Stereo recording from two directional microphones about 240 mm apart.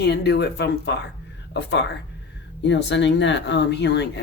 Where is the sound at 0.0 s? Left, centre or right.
Left.